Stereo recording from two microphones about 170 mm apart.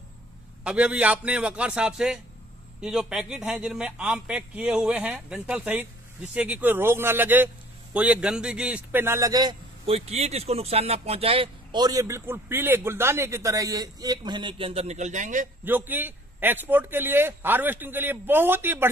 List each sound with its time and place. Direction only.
0.7 s a man's voice: 10° right (ahead or behind); by 9.6 s 25° right (ahead or behind)
9.8 s speech: 35° right (ahead or behind)
15.6 s a man's voice: 10° right (ahead or behind)